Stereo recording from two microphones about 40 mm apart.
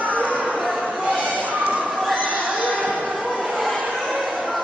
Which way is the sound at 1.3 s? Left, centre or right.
Right.